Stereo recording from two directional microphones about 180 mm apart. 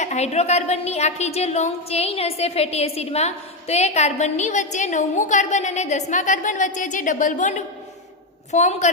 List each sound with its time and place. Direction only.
0.0 s a woman's voice: 40° left (ahead or behind)